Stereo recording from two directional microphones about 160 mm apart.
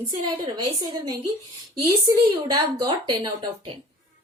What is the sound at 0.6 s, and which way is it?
A woman's voice, 25° right (ahead or behind).